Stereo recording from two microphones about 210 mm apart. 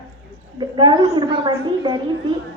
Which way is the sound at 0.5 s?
20° right (ahead or behind).